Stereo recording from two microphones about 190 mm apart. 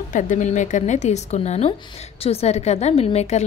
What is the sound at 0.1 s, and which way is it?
A woman's voice, 40° left (ahead or behind).